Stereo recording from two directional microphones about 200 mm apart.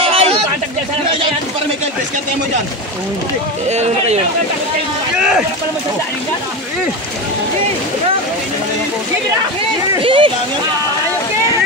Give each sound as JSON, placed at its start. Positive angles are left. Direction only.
{"t": 0.0, "sound": "a sound", "side_deg": -30}
{"t": 3.6, "sound": "speech", "side_deg": -35}
{"t": 10.0, "sound": "speech", "side_deg": -25}